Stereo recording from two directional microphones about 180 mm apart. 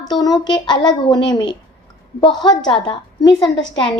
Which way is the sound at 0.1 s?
20° left (ahead or behind).